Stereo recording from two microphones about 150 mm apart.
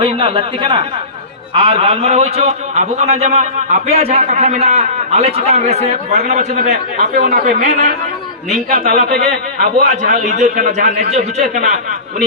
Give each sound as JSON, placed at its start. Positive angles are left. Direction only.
{"t": 0.0, "sound": "a man's voice", "side_deg": -35}